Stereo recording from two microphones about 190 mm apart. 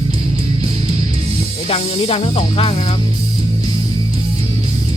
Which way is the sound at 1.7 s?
30° left (ahead or behind).